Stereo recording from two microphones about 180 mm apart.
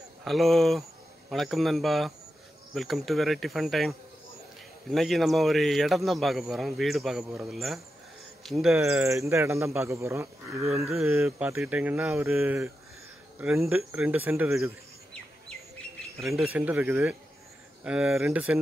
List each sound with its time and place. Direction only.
0.2 s speech: centre (ahead or behind)
4.9 s speech: centre (ahead or behind)
8.7 s speech: 15° right (ahead or behind)
16.2 s speech: centre (ahead or behind)